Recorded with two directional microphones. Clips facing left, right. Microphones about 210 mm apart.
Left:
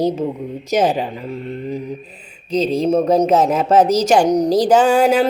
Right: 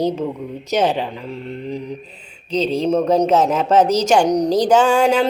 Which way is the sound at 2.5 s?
10° left (ahead or behind).